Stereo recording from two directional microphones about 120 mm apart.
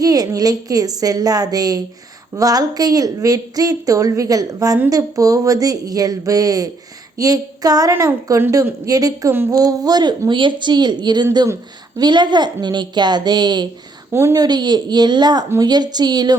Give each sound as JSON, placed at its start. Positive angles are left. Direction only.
{"t": 0.0, "sound": "a woman's voice", "side_deg": -30}
{"t": 14.1, "sound": "a woman's voice", "side_deg": -20}
{"t": 14.4, "sound": "a woman's voice", "side_deg": -35}